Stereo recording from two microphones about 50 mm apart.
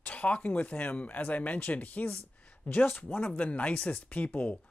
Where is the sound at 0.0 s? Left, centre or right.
Left.